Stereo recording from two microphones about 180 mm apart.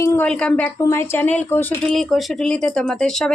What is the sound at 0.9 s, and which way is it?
Speech, 10° left (ahead or behind).